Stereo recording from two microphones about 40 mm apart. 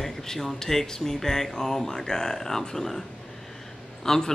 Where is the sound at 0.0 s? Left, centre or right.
Centre.